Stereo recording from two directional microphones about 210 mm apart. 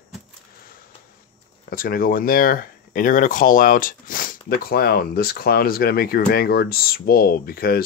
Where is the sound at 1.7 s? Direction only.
45° left (ahead or behind).